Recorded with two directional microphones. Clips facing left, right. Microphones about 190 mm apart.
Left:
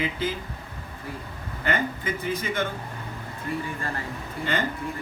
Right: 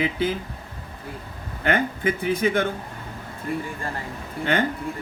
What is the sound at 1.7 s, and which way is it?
Speech, 60° right (ahead or behind).